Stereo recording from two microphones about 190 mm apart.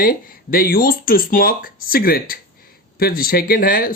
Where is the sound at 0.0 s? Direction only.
50° left (ahead or behind).